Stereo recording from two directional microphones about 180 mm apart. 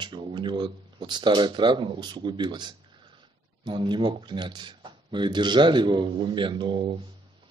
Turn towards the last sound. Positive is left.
turn(degrees=-25)  # may be behind; listen again after turning